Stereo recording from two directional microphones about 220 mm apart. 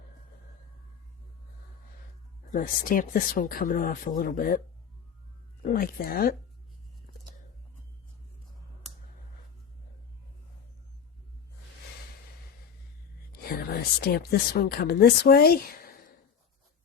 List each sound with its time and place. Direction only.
2.5 s speech: 40° left (ahead or behind)
5.7 s speech: 40° left (ahead or behind)
13.4 s speech: 45° left (ahead or behind)